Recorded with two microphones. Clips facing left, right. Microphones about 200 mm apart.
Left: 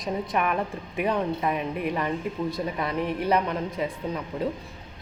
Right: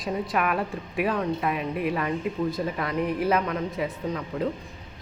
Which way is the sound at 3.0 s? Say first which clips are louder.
Even; centre (ahead or behind).